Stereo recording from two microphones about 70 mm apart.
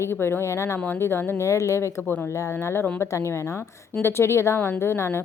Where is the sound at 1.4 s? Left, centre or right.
Left.